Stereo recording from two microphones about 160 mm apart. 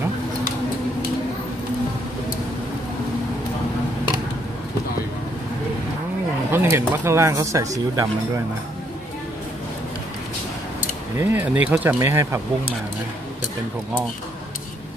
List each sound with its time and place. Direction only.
6.5 s speech: 15° right (ahead or behind)
11.1 s speech: 10° right (ahead or behind)